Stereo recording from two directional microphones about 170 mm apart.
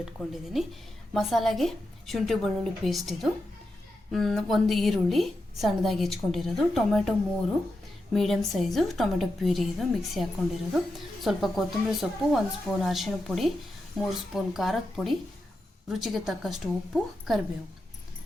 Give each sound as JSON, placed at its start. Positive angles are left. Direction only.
{"t": 0.5, "sound": "a woman's voice", "side_deg": 0}
{"t": 8.1, "sound": "a woman's voice", "side_deg": 0}